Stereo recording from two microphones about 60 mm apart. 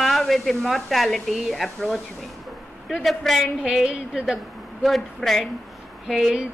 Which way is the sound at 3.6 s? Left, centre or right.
Centre.